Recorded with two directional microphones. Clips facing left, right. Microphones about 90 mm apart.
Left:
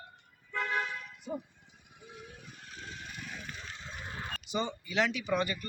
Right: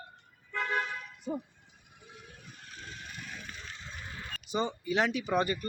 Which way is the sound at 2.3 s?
15° left (ahead or behind).